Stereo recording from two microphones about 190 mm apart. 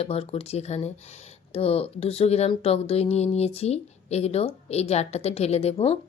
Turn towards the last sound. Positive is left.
turn(degrees=30)  # may be behind; listen again after turning